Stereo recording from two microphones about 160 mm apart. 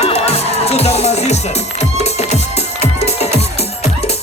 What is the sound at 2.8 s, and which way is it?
Music, 45° left (ahead or behind).